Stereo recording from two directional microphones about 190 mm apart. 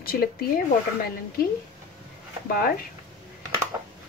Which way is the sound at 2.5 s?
50° left (ahead or behind).